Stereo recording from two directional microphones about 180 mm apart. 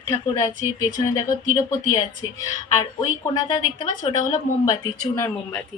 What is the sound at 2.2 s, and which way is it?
A woman's voice, 20° left (ahead or behind).